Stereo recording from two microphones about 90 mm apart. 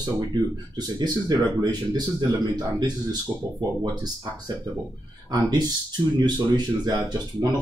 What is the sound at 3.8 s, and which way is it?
Speech, 50° right (ahead or behind).